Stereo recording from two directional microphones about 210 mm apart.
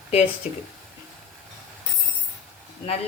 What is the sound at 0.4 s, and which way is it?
Speech, 35° left (ahead or behind).